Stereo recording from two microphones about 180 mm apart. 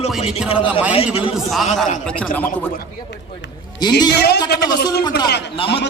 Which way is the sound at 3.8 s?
20° left (ahead or behind).